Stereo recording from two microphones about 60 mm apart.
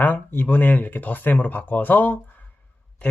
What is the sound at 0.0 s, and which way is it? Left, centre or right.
Speech, left.